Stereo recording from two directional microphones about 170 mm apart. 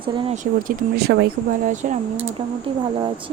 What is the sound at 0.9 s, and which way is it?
Speech, 70° right (ahead or behind).